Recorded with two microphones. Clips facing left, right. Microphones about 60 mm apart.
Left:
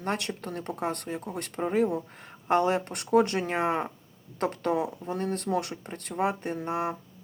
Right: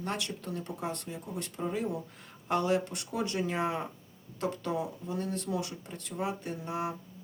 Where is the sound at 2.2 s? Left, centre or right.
Left.